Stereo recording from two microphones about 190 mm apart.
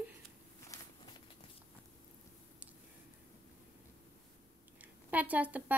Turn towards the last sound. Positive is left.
turn(degrees=-10)  # may be behind; listen again after turning